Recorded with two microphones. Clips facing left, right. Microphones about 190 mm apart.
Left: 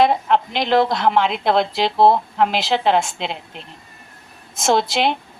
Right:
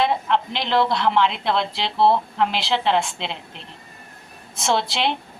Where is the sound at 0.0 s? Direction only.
45° left (ahead or behind).